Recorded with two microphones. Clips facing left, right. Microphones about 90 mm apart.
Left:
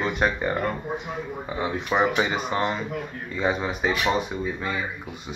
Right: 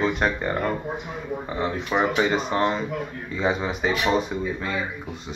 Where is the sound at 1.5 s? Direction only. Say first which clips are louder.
Even; 5° left (ahead or behind).